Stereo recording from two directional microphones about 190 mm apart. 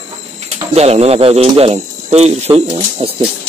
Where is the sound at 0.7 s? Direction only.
35° right (ahead or behind).